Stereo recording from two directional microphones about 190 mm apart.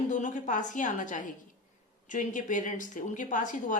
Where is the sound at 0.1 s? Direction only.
40° left (ahead or behind).